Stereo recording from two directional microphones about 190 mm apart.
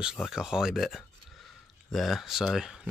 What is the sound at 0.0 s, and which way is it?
Speech, centre (ahead or behind).